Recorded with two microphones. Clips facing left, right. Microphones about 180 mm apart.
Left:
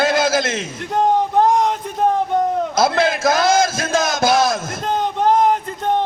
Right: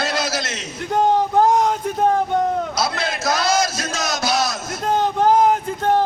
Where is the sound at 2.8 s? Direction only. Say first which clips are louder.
Left 7 dB; 50° left (ahead or behind).